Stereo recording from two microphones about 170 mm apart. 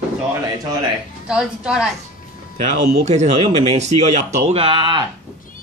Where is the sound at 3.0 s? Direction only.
40° right (ahead or behind).